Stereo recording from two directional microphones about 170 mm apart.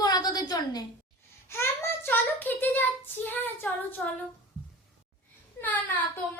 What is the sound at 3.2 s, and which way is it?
Child singing, 10° left (ahead or behind).